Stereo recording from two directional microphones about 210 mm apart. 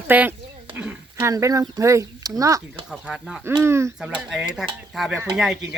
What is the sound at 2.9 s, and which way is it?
Speech, centre (ahead or behind).